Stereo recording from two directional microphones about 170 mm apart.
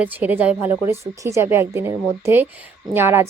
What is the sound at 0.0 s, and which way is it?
A woman's voice, 10° right (ahead or behind).